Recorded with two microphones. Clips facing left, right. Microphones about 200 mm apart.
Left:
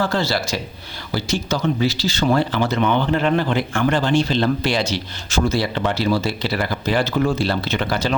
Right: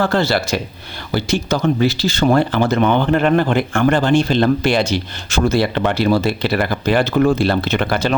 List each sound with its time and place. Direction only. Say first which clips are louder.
0.0 s speech: right 4 dB; 60° right (ahead or behind)